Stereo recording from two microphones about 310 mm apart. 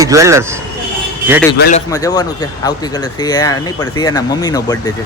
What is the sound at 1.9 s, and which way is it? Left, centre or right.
Speech, centre.